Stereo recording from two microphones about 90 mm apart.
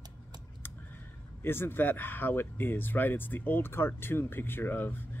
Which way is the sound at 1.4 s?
25° left (ahead or behind).